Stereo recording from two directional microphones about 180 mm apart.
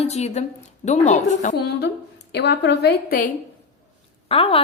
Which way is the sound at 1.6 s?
70° left (ahead or behind).